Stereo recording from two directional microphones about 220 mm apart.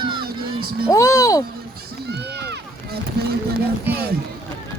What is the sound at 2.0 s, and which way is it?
Run, 50° right (ahead or behind).